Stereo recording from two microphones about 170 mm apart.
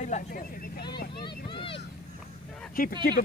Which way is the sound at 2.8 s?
60° left (ahead or behind).